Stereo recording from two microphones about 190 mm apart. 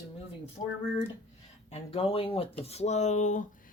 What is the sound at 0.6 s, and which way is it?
Speech, 35° left (ahead or behind).